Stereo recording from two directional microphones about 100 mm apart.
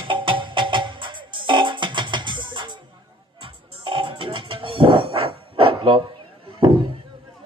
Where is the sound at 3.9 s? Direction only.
55° right (ahead or behind).